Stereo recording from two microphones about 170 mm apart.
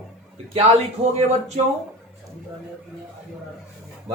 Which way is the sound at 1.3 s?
40° right (ahead or behind).